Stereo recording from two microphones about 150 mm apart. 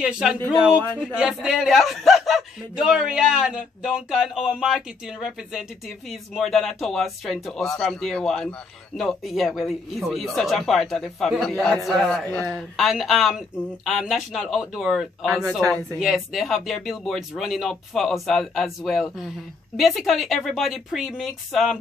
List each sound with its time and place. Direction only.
0.0 s speech: 5° right (ahead or behind)